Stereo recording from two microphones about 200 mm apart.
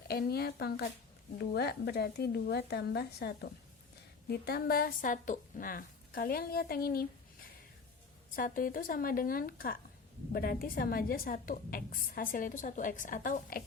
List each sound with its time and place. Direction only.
0.1 s a woman's voice: 50° left (ahead or behind)
8.4 s a woman's voice: 45° left (ahead or behind)